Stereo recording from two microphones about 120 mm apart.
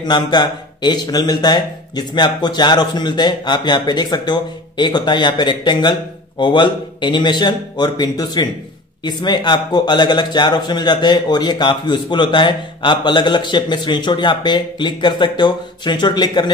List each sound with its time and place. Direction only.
0.0 s speech: 35° left (ahead or behind)